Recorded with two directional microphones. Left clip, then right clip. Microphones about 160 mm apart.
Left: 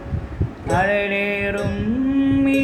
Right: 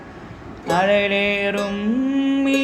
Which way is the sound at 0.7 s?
45° right (ahead or behind).